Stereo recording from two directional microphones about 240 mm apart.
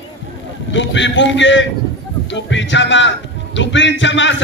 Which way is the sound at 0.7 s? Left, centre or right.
Left.